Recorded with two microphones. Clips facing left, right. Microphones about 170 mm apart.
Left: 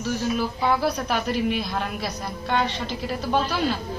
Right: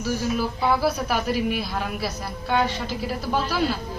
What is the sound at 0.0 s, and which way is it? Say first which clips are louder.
A man's voice: even; 10° right (ahead or behind).